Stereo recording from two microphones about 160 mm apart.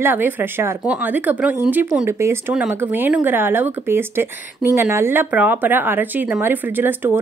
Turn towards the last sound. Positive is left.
turn(degrees=-10)  # may be behind; listen again after turning